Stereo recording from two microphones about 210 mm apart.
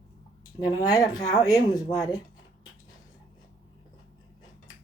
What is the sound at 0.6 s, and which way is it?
Speech, 15° left (ahead or behind).